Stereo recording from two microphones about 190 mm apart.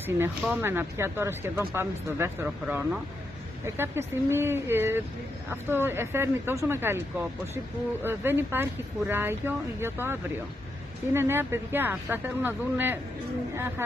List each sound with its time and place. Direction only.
0.4 s speech: 10° right (ahead or behind)
11.1 s speech: 10° right (ahead or behind)